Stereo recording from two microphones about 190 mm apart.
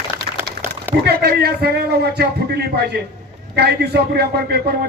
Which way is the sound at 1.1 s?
55° right (ahead or behind).